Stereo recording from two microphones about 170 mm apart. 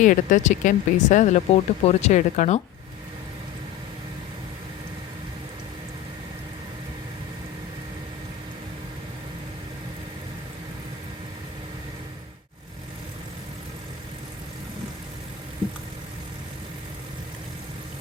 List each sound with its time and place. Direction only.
0.0 s speech: 50° left (ahead or behind)